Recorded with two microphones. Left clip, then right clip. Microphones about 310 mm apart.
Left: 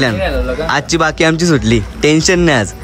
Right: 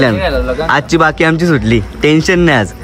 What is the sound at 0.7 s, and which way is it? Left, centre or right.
Speech, centre.